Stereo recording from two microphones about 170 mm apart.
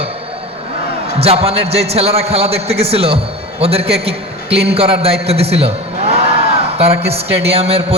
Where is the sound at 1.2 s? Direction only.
35° right (ahead or behind).